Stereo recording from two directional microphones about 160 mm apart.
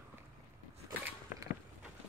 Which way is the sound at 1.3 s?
60° left (ahead or behind).